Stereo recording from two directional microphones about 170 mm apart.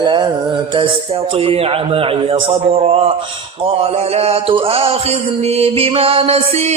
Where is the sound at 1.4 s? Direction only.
35° right (ahead or behind).